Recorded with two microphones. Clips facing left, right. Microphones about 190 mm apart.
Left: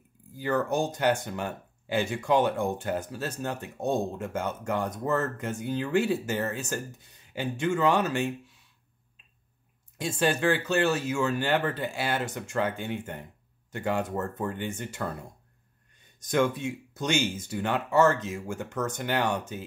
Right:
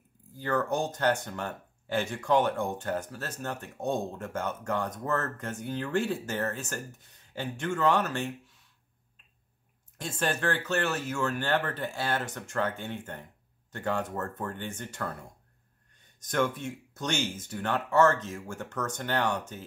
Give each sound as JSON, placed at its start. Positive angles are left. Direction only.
{"t": 0.4, "sound": "speech", "side_deg": 5}
{"t": 9.9, "sound": "speech", "side_deg": 10}
{"t": 16.2, "sound": "speech", "side_deg": 10}